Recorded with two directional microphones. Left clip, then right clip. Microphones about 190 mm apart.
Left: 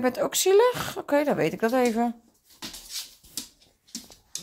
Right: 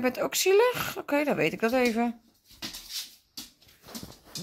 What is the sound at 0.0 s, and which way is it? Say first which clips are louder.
Speech: left 2 dB; 15° left (ahead or behind).